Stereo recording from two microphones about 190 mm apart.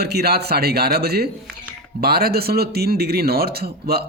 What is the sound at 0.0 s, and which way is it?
A man's voice, 55° right (ahead or behind).